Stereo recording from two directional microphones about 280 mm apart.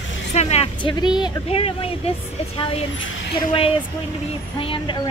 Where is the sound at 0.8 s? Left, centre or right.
Centre.